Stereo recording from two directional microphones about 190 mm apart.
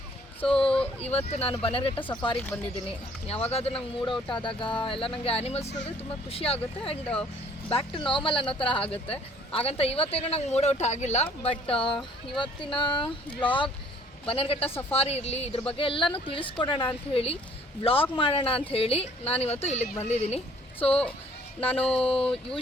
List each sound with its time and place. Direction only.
0.4 s a sound: 5° left (ahead or behind)
1.3 s speech: 30° left (ahead or behind)
2.3 s speech: 10° left (ahead or behind)
3.2 s speech: 30° left (ahead or behind)
7.0 s speech: 5° left (ahead or behind)
7.7 s speech: 25° left (ahead or behind)
22.0 s speech: 30° left (ahead or behind)